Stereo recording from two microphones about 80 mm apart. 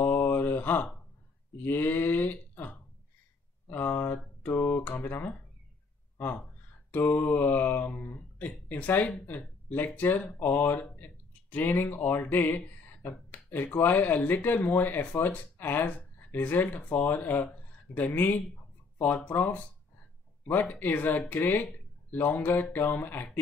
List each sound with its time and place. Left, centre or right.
0.0 s mantra: left
1.6 s speech: left
3.6 s mantra: left
5.0 s speech: left
7.2 s mantra: left
8.6 s speech: left